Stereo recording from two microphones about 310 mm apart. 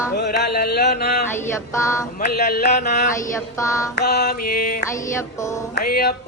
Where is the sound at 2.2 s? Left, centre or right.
Left.